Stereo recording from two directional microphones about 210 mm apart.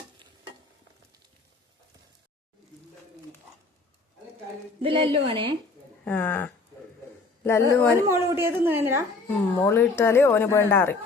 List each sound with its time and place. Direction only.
4.8 s a woman's voice: 25° right (ahead or behind)
6.1 s speech: 10° left (ahead or behind)
8.0 s a woman's voice: 10° right (ahead or behind)
9.6 s speech: 10° left (ahead or behind)